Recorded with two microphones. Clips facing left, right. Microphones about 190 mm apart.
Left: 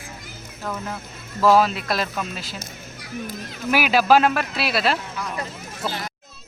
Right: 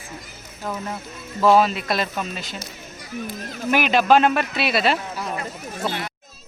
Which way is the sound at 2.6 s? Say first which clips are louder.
Right 1 dB; 50° left (ahead or behind).